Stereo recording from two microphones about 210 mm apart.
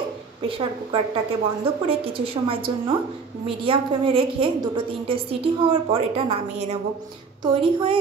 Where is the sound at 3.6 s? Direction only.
25° right (ahead or behind).